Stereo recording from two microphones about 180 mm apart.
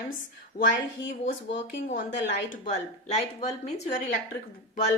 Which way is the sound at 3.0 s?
40° left (ahead or behind).